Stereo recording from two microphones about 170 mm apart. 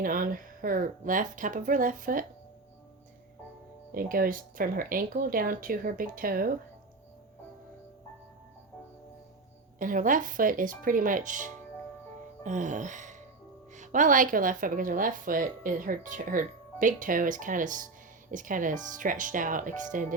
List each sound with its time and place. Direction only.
0.0 s a woman's voice: 55° right (ahead or behind)
3.9 s speech: 55° right (ahead or behind)
9.7 s a woman's voice: 50° right (ahead or behind)